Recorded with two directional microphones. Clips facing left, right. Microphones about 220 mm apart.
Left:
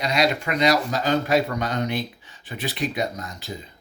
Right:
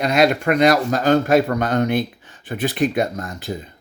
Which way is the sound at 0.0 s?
55° right (ahead or behind).